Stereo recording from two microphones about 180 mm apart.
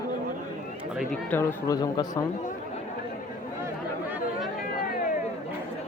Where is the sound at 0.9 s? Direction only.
5° left (ahead or behind).